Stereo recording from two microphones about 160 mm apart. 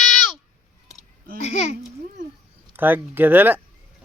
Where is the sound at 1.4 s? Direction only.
45° left (ahead or behind).